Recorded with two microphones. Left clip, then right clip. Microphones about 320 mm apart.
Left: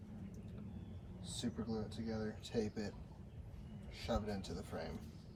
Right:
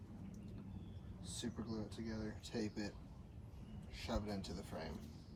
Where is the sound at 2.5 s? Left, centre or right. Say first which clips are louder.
Left 4 dB; centre.